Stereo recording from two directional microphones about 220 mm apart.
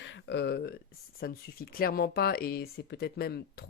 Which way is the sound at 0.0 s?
55° left (ahead or behind).